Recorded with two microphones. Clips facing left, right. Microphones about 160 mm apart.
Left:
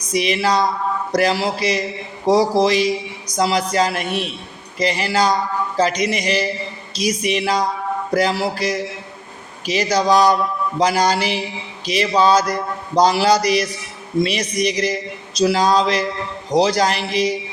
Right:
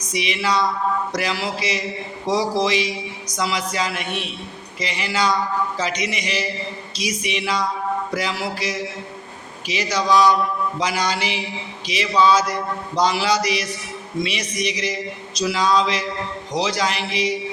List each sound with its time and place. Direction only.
0.1 s a man's voice: 40° left (ahead or behind)